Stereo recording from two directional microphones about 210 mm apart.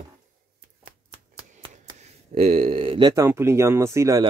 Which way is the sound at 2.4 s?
30° right (ahead or behind).